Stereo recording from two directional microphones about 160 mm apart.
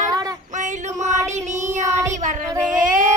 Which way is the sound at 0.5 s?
50° right (ahead or behind).